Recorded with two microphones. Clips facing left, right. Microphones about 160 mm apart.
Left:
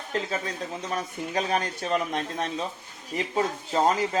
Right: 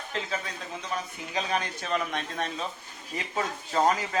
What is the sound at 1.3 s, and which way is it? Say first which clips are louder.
Speech: left 3 dB; 45° left (ahead or behind).